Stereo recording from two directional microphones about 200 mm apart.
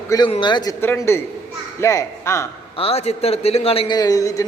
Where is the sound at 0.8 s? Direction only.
10° left (ahead or behind).